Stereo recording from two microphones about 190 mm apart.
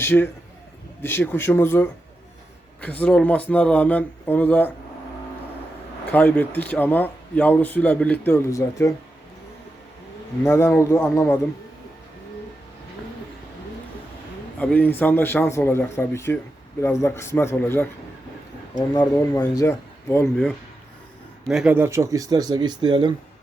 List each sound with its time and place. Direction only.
0.0 s speech: 10° left (ahead or behind)
6.1 s speech: 10° left (ahead or behind)
10.4 s speech: 15° left (ahead or behind)
14.6 s speech: 10° left (ahead or behind)
21.4 s speech: 5° right (ahead or behind); by 23.1 s 20° right (ahead or behind)